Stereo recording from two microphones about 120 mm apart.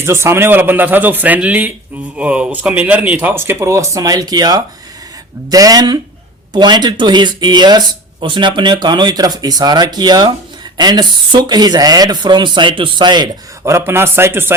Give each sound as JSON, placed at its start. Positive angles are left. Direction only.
{"t": 0.0, "sound": "speech", "side_deg": -20}
{"t": 13.7, "sound": "a man's voice", "side_deg": -20}